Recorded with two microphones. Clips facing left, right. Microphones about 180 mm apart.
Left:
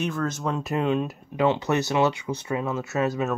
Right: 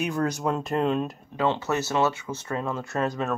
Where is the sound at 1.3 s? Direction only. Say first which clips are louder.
Left 3 dB; 15° left (ahead or behind).